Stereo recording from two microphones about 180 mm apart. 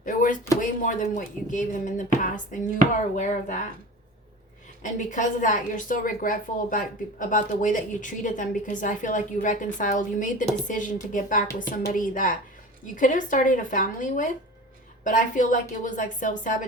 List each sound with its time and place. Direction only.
0.0 s a sound: 50° left (ahead or behind)
0.6 s a woman's voice: 45° left (ahead or behind)
4.8 s a woman's voice: 45° left (ahead or behind)